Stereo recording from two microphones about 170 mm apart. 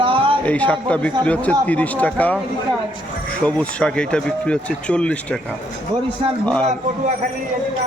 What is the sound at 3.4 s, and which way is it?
A man's voice, 5° left (ahead or behind).